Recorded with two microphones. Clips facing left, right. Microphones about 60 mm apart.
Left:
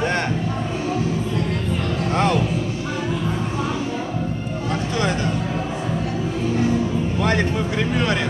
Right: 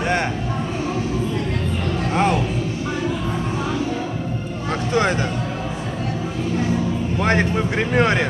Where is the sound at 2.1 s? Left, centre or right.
Centre.